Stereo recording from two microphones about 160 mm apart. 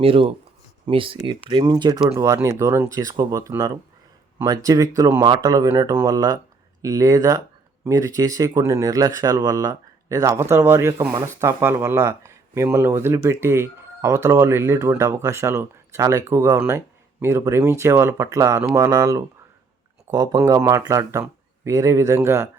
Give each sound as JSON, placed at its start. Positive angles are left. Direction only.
{"t": 0.0, "sound": "speech", "side_deg": -35}